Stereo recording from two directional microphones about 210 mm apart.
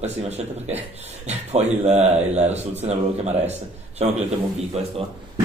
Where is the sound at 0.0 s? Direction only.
30° right (ahead or behind).